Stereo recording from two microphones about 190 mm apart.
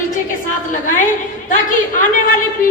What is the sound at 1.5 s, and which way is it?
Speech, 45° left (ahead or behind).